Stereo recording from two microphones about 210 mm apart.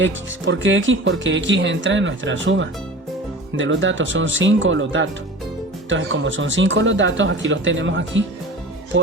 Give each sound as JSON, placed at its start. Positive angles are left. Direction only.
{"t": 0.0, "sound": "speech", "side_deg": -65}